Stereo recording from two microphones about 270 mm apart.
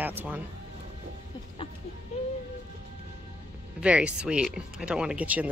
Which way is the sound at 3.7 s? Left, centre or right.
Centre.